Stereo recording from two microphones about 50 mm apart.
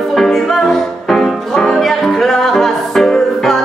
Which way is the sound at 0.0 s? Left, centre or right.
Centre.